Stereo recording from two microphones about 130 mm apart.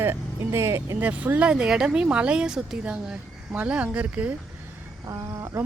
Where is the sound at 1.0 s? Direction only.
10° right (ahead or behind).